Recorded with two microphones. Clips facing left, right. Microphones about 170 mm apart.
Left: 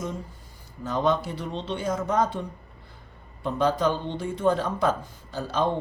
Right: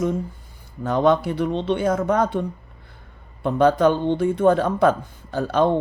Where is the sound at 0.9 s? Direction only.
60° right (ahead or behind).